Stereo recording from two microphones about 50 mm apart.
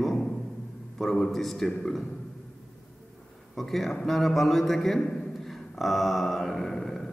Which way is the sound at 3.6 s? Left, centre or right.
Centre.